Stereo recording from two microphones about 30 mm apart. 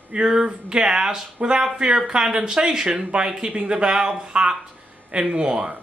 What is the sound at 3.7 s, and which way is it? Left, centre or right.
Speech, right.